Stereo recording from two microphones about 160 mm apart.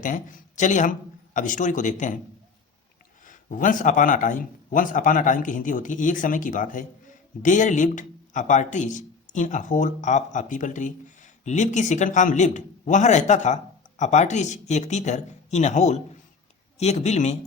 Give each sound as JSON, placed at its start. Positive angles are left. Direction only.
{"t": 0.0, "sound": "speech", "side_deg": 55}
{"t": 3.2, "sound": "speech", "side_deg": 55}